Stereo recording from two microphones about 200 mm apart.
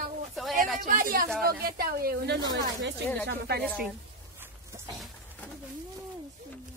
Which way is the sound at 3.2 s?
55° right (ahead or behind).